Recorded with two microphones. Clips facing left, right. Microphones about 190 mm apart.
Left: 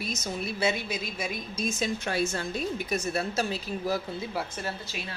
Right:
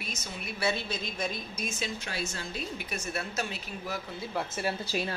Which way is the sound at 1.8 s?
55° left (ahead or behind).